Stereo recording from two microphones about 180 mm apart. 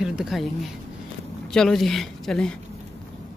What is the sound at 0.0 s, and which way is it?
Speech, centre (ahead or behind).